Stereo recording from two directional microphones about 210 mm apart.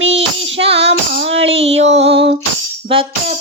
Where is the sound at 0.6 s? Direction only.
30° right (ahead or behind).